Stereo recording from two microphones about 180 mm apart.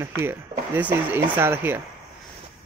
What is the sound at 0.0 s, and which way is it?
Speech, 15° right (ahead or behind).